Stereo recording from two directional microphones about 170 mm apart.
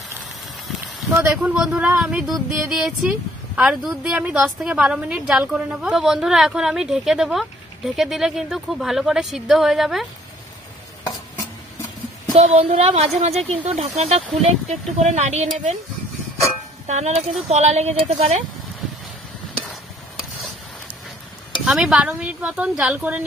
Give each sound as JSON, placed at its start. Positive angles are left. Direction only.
{"t": 1.0, "sound": "speech", "side_deg": -10}
{"t": 12.4, "sound": "speech", "side_deg": -40}
{"t": 16.8, "sound": "speech", "side_deg": -45}
{"t": 21.6, "sound": "speech", "side_deg": -5}